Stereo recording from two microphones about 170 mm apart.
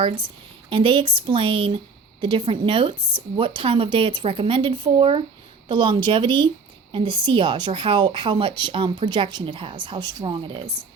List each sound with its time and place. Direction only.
0.7 s a woman's voice: 30° right (ahead or behind)